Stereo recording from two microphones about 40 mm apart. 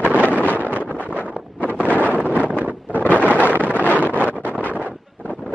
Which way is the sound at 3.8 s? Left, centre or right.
Left.